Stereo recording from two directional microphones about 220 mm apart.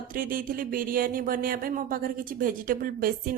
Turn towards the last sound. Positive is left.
turn(degrees=-40)  # may be behind; listen again after turning